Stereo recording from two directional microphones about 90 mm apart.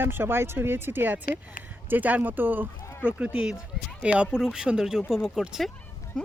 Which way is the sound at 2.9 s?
25° left (ahead or behind).